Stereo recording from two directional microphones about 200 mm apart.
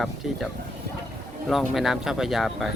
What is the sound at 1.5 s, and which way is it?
Speech, centre (ahead or behind).